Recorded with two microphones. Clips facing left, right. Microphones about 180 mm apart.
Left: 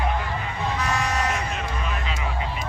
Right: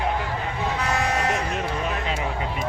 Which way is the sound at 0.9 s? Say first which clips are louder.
Right 2 dB; 60° right (ahead or behind).